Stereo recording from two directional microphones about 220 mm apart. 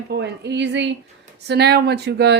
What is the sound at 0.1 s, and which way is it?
Speech, 50° right (ahead or behind).